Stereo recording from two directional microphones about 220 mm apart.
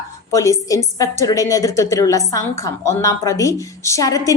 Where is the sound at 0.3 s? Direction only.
15° left (ahead or behind).